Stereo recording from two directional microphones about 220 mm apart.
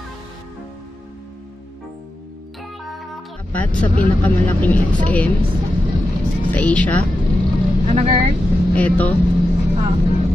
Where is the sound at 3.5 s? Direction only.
5° left (ahead or behind).